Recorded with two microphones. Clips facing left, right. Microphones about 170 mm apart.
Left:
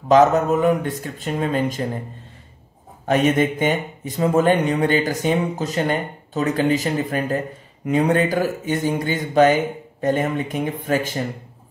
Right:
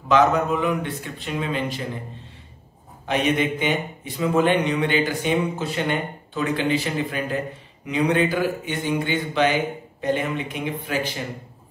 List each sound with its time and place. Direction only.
0.1 s a man's voice: 45° left (ahead or behind)
3.1 s a man's voice: 45° left (ahead or behind)